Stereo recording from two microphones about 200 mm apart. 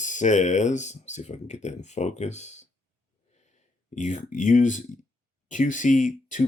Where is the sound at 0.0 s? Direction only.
40° left (ahead or behind).